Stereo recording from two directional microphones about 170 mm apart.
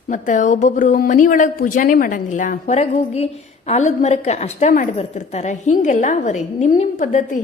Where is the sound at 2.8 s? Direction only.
40° left (ahead or behind).